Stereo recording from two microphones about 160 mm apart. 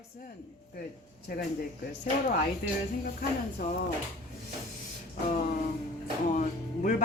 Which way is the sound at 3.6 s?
75° left (ahead or behind).